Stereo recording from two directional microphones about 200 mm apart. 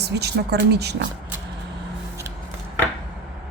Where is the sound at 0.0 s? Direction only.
55° right (ahead or behind).